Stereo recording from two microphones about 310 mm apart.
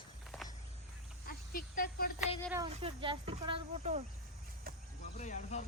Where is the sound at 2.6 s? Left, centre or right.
Centre.